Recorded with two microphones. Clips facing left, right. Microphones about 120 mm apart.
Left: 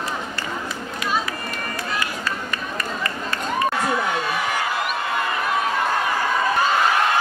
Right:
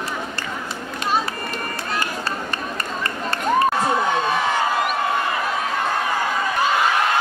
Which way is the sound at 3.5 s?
25° right (ahead or behind).